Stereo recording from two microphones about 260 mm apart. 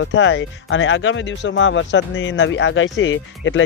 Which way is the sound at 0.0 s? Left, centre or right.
Left.